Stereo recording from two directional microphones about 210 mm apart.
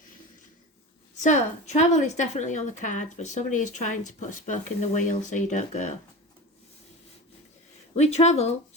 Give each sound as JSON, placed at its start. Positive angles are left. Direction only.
{"t": 1.1, "sound": "a woman's voice", "side_deg": 35}
{"t": 7.9, "sound": "a woman's voice", "side_deg": 30}